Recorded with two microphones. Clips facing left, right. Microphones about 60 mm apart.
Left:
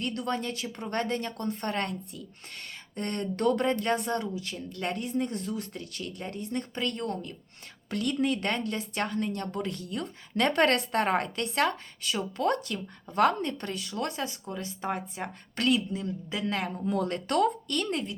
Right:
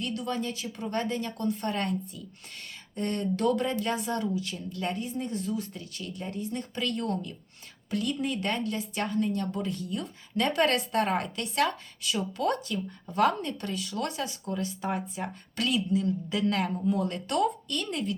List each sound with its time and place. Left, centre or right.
0.0 s a woman's voice: left
4.7 s a woman's voice: left
7.9 s a woman's voice: left
16.8 s a woman's voice: left